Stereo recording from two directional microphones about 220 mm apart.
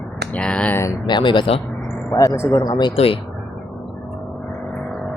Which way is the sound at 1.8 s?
10° left (ahead or behind).